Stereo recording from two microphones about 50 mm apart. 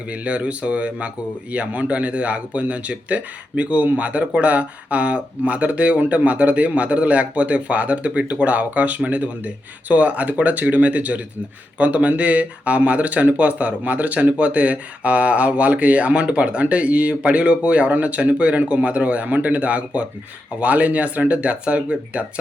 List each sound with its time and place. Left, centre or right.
0.1 s speech: right